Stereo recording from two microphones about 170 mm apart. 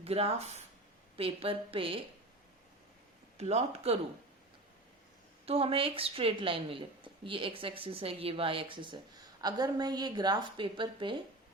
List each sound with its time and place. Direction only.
0.0 s a woman's voice: 35° right (ahead or behind)
3.3 s a woman's voice: 40° right (ahead or behind)
5.5 s a woman's voice: 35° right (ahead or behind)